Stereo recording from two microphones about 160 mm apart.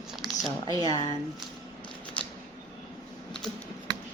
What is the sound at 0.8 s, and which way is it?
Speech, 25° left (ahead or behind).